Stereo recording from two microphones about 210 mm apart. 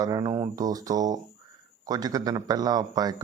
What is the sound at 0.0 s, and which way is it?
A man's voice, 20° right (ahead or behind).